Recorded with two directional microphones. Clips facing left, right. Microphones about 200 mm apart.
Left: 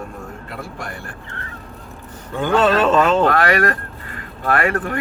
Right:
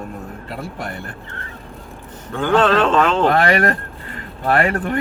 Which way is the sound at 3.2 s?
25° right (ahead or behind).